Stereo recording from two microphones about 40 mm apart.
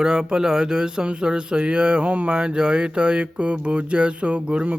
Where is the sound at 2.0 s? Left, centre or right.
Right.